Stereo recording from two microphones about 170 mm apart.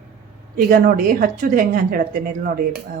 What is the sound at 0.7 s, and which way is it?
A woman's voice, 55° right (ahead or behind).